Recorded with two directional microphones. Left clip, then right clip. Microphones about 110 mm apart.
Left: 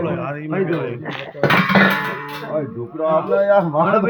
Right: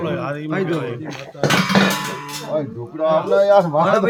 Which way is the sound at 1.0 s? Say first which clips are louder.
Left 4 dB; 40° left (ahead or behind).